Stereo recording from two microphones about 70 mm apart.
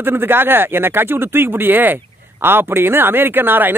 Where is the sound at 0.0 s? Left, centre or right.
Right.